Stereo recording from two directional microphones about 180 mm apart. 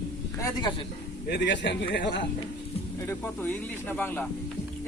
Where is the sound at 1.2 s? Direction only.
70° left (ahead or behind).